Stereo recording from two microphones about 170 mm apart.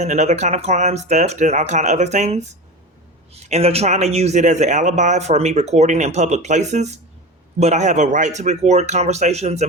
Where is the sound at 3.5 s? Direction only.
35° right (ahead or behind).